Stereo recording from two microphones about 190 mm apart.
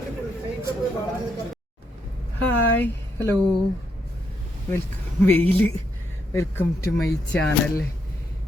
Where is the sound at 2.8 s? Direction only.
10° left (ahead or behind).